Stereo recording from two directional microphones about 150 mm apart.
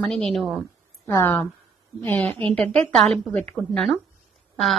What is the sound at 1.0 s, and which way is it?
A woman's voice, 20° left (ahead or behind).